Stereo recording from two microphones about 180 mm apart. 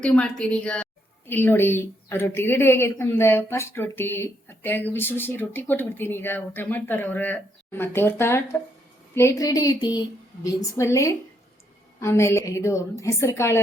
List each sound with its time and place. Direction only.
0.0 s a woman's voice: 5° left (ahead or behind)